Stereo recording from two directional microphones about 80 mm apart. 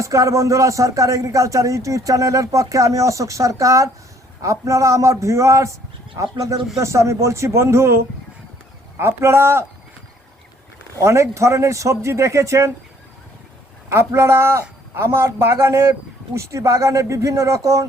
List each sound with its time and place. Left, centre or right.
0.0 s a man's voice: right
6.7 s a man's voice: right
11.0 s a man's voice: right
13.9 s a man's voice: right